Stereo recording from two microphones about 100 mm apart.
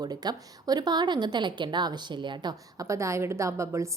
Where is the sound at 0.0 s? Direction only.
40° right (ahead or behind).